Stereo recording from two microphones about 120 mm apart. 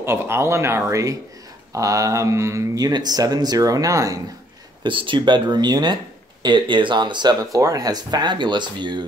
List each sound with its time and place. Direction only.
0.0 s speech: 20° right (ahead or behind)
4.8 s speech: 45° right (ahead or behind)